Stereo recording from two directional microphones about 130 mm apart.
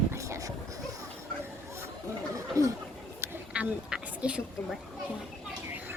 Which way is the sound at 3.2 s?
10° right (ahead or behind).